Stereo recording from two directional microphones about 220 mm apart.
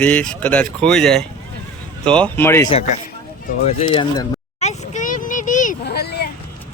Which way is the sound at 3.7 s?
25° left (ahead or behind).